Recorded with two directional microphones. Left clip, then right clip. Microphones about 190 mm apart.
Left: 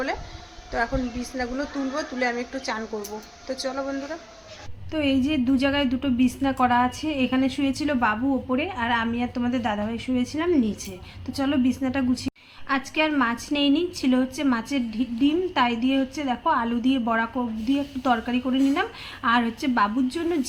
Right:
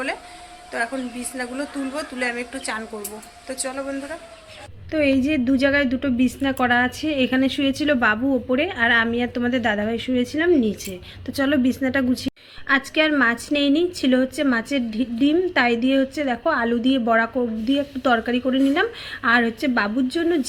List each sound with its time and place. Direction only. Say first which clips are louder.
0.7 s speech: even; 5° left (ahead or behind)
3.6 s a woman's voice: right 1 dB; centre (ahead or behind)